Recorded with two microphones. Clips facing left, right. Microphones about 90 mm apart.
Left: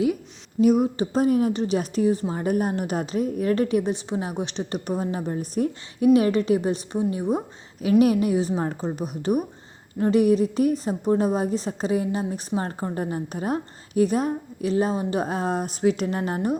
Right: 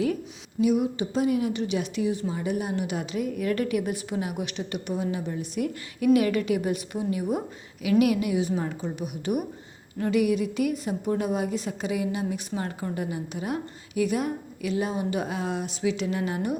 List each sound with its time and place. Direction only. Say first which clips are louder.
0.6 s a woman's voice: left 4 dB; 45° left (ahead or behind)